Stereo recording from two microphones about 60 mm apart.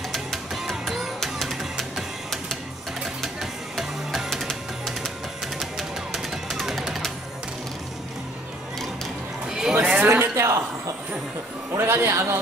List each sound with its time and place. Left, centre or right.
0.1 s music: centre
5.6 s music: centre
9.5 s sheep: centre
9.8 s a sound: right
10.0 s a sound: right
11.7 s speech: right